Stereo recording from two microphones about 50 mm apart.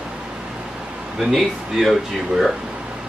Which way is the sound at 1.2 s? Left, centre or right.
Centre.